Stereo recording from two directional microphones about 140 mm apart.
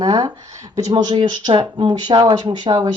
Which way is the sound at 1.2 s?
40° right (ahead or behind).